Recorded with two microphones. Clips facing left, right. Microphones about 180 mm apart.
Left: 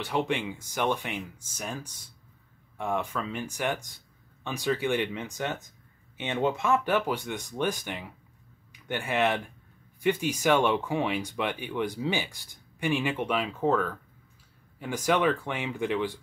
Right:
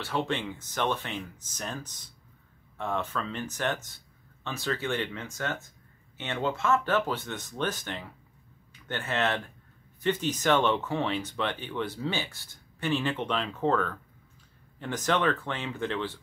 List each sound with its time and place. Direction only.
0.0 s speech: 15° left (ahead or behind)